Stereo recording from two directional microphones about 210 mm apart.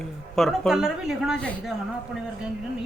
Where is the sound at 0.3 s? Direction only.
Centre (ahead or behind).